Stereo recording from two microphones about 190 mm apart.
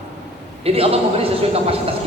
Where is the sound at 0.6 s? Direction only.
30° right (ahead or behind).